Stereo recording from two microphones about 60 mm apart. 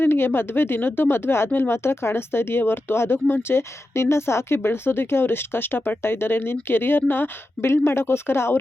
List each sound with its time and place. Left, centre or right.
0.0 s speech: left